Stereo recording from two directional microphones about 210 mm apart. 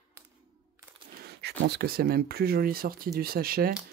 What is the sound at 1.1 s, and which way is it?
Speech, 50° right (ahead or behind).